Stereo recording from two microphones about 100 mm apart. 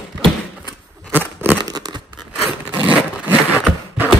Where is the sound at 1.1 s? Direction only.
20° right (ahead or behind).